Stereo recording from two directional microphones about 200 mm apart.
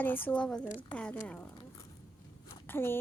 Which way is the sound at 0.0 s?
10° left (ahead or behind).